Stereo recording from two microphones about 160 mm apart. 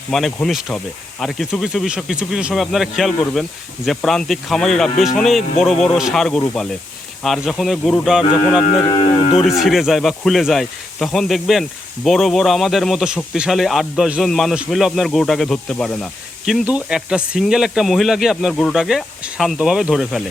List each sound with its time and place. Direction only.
0.1 s speech: centre (ahead or behind)
8.2 s speech: 30° left (ahead or behind)
9.4 s speech: centre (ahead or behind)